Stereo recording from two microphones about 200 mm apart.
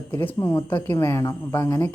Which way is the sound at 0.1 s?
10° left (ahead or behind).